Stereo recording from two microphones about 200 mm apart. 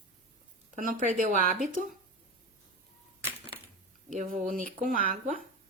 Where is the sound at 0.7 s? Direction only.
45° right (ahead or behind).